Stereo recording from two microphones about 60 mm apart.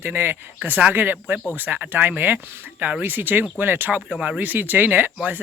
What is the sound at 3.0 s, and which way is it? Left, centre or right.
Speech, right.